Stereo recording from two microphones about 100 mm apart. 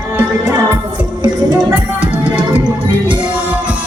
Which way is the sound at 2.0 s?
15° right (ahead or behind).